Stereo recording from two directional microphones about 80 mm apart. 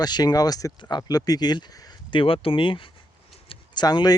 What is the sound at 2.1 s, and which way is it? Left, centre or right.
Speech, left.